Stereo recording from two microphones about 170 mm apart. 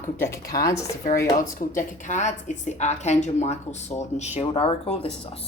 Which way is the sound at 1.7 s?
45° left (ahead or behind).